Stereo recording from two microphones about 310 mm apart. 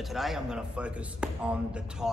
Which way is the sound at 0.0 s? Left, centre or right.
Centre.